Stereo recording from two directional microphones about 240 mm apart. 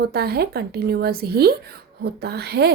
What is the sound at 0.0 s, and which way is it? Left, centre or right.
A woman's voice, right.